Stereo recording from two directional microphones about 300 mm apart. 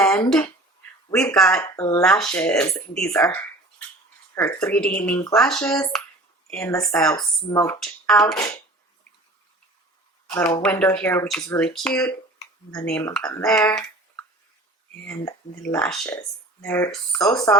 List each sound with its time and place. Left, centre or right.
0.3 s speech: centre
10.2 s speech: centre
15.0 s speech: centre